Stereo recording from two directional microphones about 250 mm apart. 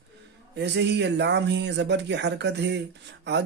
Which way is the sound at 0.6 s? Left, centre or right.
Right.